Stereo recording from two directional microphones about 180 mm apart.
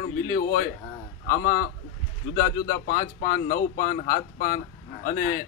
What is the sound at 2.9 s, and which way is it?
A man's voice, 50° left (ahead or behind).